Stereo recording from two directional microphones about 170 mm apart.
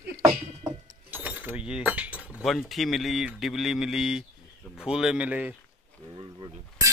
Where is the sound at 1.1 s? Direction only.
10° right (ahead or behind).